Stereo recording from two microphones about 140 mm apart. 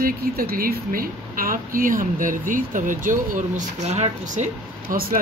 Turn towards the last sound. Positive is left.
turn(degrees=-85)